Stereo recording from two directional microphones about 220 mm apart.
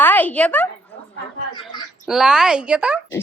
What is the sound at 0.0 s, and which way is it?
Speech, 10° left (ahead or behind).